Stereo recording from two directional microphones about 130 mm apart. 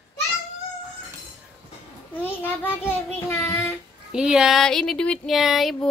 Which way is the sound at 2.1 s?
15° left (ahead or behind).